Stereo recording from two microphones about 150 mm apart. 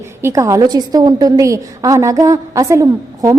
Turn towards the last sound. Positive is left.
turn(degrees=-20)  # may be behind; listen again after turning